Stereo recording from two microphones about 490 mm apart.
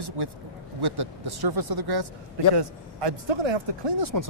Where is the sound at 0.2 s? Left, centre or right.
Right.